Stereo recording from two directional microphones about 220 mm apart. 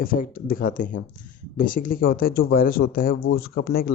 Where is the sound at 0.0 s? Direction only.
40° left (ahead or behind).